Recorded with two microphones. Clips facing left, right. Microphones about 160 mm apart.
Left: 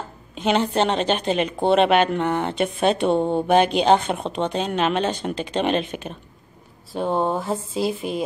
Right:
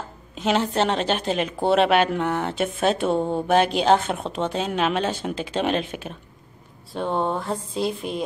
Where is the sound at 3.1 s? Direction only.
25° left (ahead or behind).